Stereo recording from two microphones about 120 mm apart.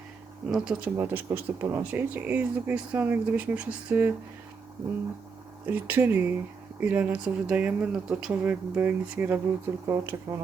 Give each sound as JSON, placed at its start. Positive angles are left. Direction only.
{"t": 0.4, "sound": "speech", "side_deg": -5}
{"t": 0.9, "sound": "speech", "side_deg": -20}
{"t": 5.6, "sound": "speech", "side_deg": -15}